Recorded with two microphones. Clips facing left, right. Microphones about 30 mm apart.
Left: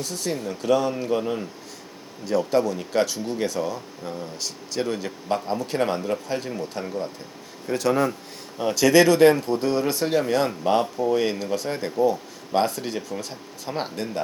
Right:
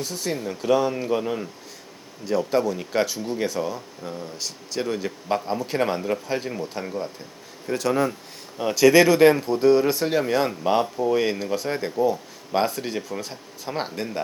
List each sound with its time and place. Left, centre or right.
0.0 s speech: centre